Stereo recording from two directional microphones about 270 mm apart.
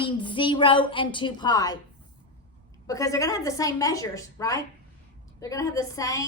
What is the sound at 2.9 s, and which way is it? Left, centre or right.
A woman's voice, centre.